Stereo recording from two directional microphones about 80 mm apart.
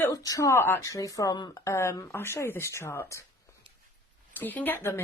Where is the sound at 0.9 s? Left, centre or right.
Left.